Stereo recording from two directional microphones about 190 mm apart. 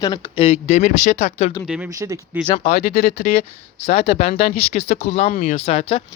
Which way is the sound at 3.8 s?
30° left (ahead or behind).